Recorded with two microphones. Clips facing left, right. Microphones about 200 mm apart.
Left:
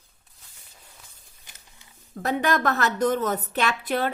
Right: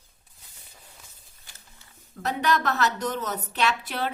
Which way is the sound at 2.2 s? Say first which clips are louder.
Left 2 dB; 50° left (ahead or behind).